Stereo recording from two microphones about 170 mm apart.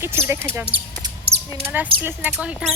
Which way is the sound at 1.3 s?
35° right (ahead or behind).